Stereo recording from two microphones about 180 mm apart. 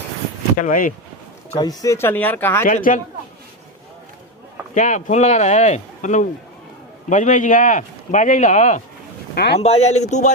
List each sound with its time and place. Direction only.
0.6 s speech: 45° left (ahead or behind)
1.5 s speech: 20° left (ahead or behind)
2.6 s speech: 45° left (ahead or behind)
4.7 s speech: 45° left (ahead or behind)
9.3 s speech: 65° left (ahead or behind)
9.6 s speech: 35° left (ahead or behind)